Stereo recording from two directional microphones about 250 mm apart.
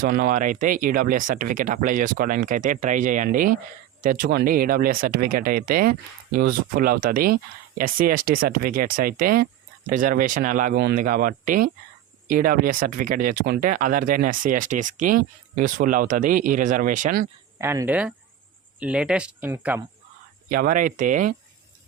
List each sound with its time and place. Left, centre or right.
0.0 s speech: right
17.6 s speech: centre
20.5 s speech: right